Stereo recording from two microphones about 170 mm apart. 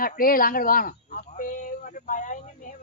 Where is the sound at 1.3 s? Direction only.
50° left (ahead or behind).